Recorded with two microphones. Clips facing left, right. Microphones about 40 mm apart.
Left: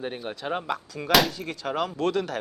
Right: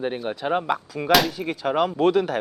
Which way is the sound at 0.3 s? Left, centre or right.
Centre.